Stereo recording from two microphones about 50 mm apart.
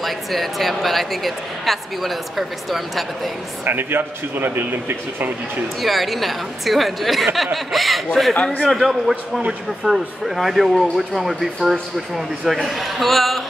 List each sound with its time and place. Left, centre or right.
0.0 s speech: centre
3.6 s speech: right
5.8 s speech: centre
9.1 s a man's voice: right
9.8 s speech: centre